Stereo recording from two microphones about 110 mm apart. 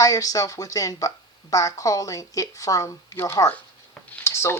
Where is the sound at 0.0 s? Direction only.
35° left (ahead or behind).